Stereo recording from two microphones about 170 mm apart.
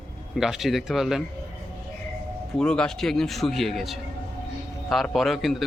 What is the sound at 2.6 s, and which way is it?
A man's voice, 5° left (ahead or behind).